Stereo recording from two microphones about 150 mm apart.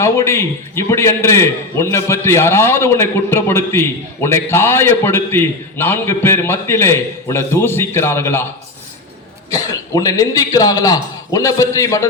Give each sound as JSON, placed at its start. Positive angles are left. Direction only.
{"t": 0.0, "sound": "a man's voice", "side_deg": 15}
{"t": 9.5, "sound": "speech", "side_deg": 25}